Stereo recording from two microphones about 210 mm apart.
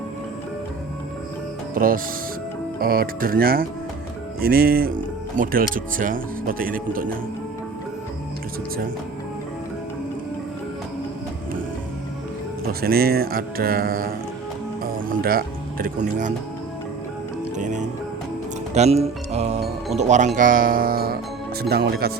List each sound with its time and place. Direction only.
1.7 s speech: 40° right (ahead or behind)
12.8 s speech: 45° right (ahead or behind)
15.1 s speech: 45° right (ahead or behind)
18.7 s speech: 30° right (ahead or behind); by 22.1 s 50° right (ahead or behind)